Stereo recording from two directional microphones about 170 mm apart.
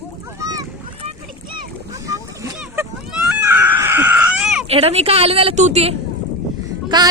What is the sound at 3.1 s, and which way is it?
Baby cry, 10° right (ahead or behind).